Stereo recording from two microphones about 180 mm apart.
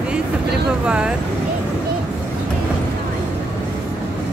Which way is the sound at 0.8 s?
5° right (ahead or behind).